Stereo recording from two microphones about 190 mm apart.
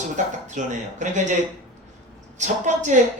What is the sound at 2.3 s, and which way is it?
Speech, 40° right (ahead or behind).